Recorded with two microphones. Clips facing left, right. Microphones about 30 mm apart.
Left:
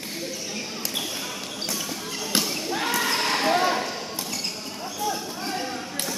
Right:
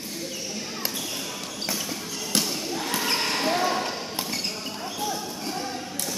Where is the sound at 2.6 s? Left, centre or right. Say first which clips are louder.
Left 3 dB; left.